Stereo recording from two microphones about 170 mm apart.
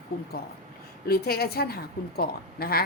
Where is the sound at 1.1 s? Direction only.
65° left (ahead or behind).